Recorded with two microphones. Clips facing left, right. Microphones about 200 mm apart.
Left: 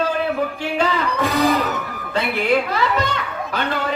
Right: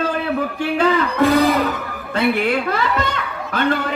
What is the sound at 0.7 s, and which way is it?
Speech, 55° right (ahead or behind).